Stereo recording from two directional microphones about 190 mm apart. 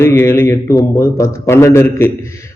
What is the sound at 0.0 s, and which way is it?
A man's voice, 10° left (ahead or behind).